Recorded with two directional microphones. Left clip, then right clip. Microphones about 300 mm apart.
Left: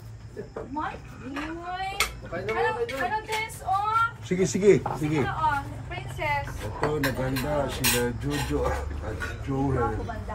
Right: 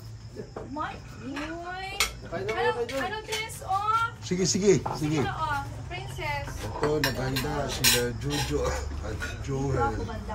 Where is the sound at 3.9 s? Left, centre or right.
Centre.